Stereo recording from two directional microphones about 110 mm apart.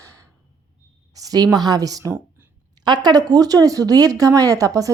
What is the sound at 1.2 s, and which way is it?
A woman's voice, 35° right (ahead or behind).